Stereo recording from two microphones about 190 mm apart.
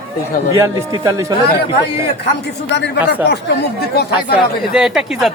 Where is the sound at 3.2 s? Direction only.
60° left (ahead or behind).